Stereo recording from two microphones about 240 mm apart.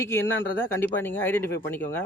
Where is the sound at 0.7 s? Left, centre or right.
Centre.